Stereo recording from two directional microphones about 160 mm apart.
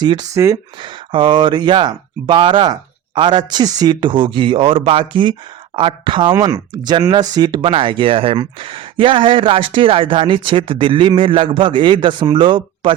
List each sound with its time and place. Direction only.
0.0 s speech: 25° right (ahead or behind)
0.8 s speech: 30° right (ahead or behind)